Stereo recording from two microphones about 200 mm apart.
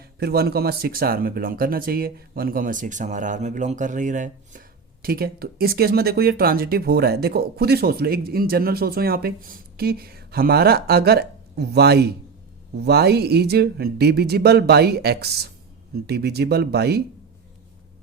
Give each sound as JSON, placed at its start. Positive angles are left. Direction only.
{"t": 0.0, "sound": "speech", "side_deg": -50}
{"t": 5.0, "sound": "speech", "side_deg": -50}